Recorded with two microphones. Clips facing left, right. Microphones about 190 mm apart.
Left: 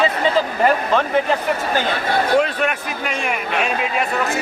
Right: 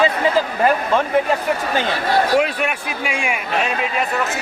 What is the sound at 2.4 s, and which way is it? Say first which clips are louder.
Speech: even; 5° right (ahead or behind).